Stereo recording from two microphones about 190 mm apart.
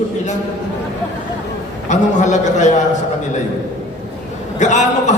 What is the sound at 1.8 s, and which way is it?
Speech, 40° left (ahead or behind).